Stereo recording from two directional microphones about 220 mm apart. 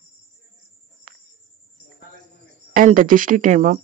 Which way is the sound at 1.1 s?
40° right (ahead or behind).